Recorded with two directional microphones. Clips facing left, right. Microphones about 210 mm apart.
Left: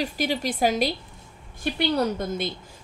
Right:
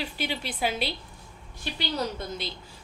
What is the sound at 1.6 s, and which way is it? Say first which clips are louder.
Speech: left 7 dB; 55° left (ahead or behind).